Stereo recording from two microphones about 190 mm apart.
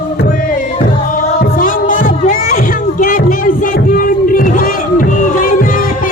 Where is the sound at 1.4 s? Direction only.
45° left (ahead or behind).